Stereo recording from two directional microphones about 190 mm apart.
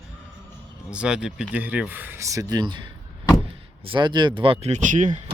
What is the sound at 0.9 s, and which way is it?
Speech, 5° right (ahead or behind).